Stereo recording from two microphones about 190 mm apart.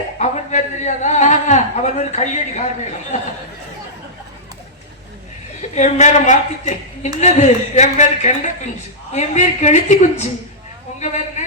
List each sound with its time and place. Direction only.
0.2 s a man's voice: 40° left (ahead or behind)
5.7 s a woman's voice: 40° left (ahead or behind)
11.4 s a sound: 35° left (ahead or behind)